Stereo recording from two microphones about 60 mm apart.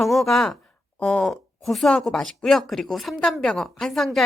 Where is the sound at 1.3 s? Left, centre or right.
Centre.